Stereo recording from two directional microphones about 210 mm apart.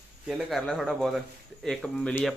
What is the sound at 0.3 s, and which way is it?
Speech, centre (ahead or behind).